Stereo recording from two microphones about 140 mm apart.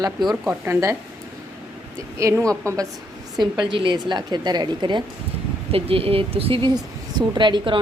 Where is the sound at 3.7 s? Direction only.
35° right (ahead or behind).